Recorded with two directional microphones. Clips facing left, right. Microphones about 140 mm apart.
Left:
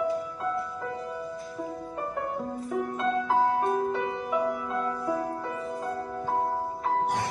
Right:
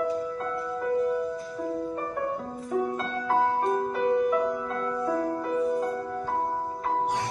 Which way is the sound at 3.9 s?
5° left (ahead or behind).